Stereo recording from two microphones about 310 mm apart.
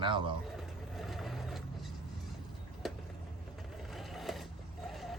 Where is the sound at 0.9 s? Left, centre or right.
Centre.